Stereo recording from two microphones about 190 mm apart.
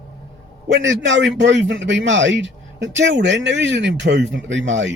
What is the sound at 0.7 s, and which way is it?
A man's voice, 75° right (ahead or behind).